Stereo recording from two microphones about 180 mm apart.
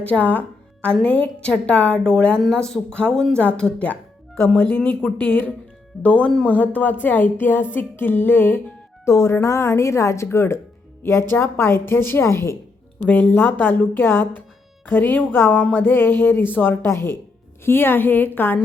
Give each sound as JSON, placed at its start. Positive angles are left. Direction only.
{"t": 0.0, "sound": "a woman's voice", "side_deg": 10}